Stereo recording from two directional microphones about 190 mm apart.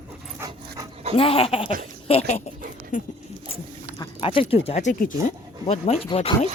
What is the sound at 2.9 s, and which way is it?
Speech, 45° left (ahead or behind).